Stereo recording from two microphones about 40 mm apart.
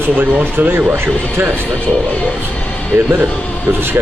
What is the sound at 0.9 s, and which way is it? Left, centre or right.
Speech, right.